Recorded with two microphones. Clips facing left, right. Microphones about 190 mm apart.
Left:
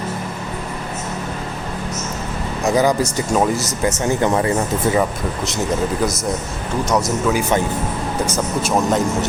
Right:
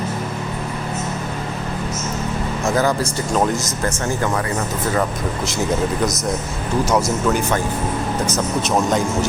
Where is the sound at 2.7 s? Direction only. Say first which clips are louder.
Left 3 dB; 15° left (ahead or behind).